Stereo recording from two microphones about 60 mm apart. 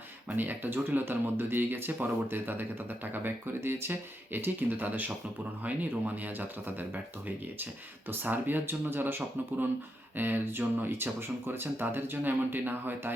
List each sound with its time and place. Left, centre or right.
0.3 s speech: right
8.1 s speech: right